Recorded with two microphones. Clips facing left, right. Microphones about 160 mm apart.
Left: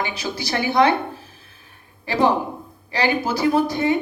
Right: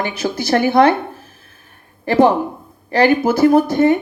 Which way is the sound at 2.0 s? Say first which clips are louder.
Right 6 dB; 55° right (ahead or behind).